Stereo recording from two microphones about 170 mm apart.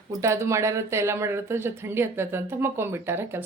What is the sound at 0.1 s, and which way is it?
Speech, 15° right (ahead or behind).